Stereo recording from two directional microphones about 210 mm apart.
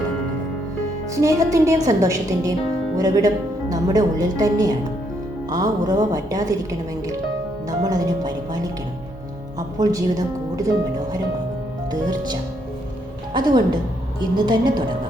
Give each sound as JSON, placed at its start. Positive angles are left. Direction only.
{"t": 1.1, "sound": "a woman's voice", "side_deg": -15}
{"t": 11.9, "sound": "a woman's voice", "side_deg": -20}